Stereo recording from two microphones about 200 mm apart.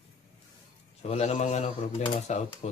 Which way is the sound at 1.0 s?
30° left (ahead or behind).